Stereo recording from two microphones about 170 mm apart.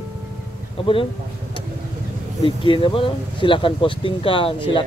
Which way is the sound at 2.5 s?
30° left (ahead or behind).